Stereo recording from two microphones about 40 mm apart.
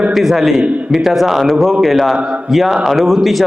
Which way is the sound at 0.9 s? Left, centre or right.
Centre.